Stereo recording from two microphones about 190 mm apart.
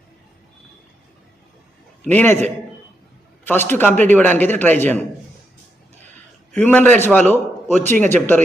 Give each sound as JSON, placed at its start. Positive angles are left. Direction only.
{"t": 2.0, "sound": "a man's voice", "side_deg": 10}
{"t": 3.4, "sound": "a man's voice", "side_deg": 10}
{"t": 6.5, "sound": "a man's voice", "side_deg": 10}